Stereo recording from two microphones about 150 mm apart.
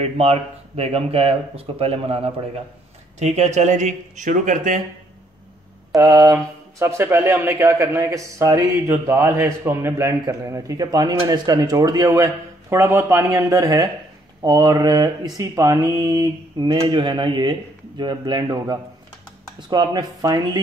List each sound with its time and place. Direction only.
0.0 s speech: 40° right (ahead or behind); by 4.8 s 60° right (ahead or behind)
5.9 s speech: 25° right (ahead or behind)